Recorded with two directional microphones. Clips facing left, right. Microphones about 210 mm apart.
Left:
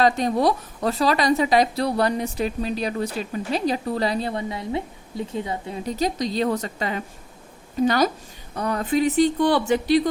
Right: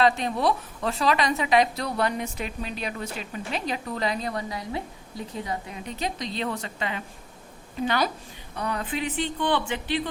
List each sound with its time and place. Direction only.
0.0 s a woman's voice: 40° left (ahead or behind)